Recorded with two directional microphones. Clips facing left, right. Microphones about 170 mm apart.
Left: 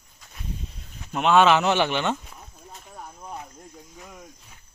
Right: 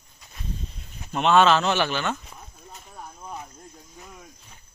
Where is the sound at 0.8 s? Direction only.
5° left (ahead or behind).